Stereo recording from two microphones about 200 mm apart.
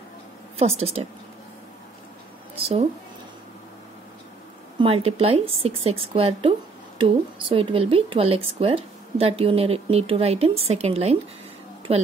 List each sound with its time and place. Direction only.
0.6 s a woman's voice: 30° right (ahead or behind)
2.5 s a woman's voice: 30° right (ahead or behind)
4.7 s a woman's voice: 30° right (ahead or behind)